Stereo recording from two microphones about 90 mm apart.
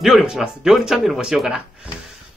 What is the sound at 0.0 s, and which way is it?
Speech, 5° right (ahead or behind).